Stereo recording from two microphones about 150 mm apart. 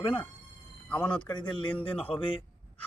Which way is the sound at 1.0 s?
10° left (ahead or behind).